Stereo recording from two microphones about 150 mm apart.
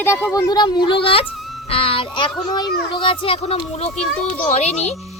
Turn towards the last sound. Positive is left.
turn(degrees=45)  # may be behind; listen again after turning